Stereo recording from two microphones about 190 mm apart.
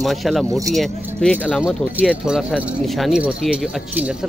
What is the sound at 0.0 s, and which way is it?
Speech, centre (ahead or behind).